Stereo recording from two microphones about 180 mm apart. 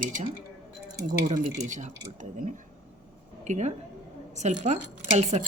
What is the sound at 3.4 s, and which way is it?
A woman's voice, 40° right (ahead or behind).